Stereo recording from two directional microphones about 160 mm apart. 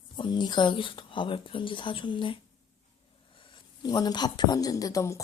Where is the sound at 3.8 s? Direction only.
25° left (ahead or behind).